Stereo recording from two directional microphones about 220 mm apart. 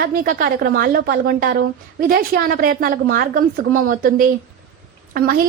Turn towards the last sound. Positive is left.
turn(degrees=-40)  # may be behind; listen again after turning